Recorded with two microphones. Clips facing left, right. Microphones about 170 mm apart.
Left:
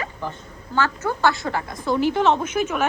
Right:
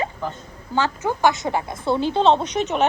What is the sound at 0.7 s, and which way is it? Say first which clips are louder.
A woman's voice: right 1 dB; 15° right (ahead or behind).